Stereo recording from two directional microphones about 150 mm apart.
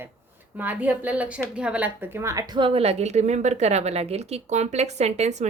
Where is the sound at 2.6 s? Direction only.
40° right (ahead or behind).